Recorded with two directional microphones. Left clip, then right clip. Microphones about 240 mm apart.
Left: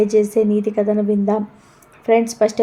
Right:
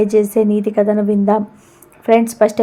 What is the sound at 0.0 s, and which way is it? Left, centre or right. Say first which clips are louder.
A woman's voice: right 2 dB; right.